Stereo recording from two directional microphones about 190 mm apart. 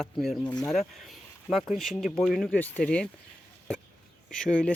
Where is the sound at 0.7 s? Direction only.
Centre (ahead or behind).